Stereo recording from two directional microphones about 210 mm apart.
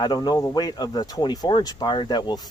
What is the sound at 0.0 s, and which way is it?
Speech, 20° left (ahead or behind).